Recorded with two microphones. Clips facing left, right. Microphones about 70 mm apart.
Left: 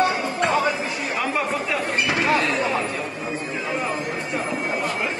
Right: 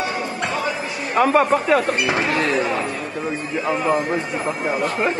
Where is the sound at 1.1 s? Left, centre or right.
Right.